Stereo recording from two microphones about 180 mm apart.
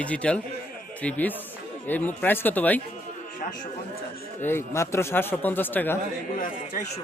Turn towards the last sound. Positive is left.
turn(degrees=45)  # may be behind; listen again after turning